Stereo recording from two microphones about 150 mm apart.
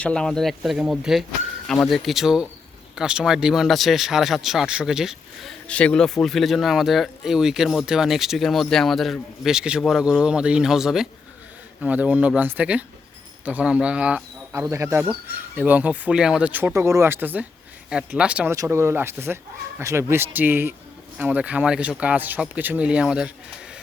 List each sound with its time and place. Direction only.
0.0 s speech: 5° left (ahead or behind); by 15.0 s 20° right (ahead or behind)
15.0 s speech: 5° right (ahead or behind)
18.5 s speech: 20° right (ahead or behind)